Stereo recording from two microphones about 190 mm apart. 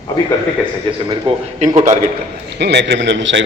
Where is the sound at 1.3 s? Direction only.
30° right (ahead or behind).